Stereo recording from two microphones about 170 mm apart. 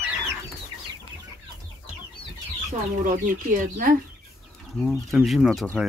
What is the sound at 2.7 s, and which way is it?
Speech, 50° right (ahead or behind).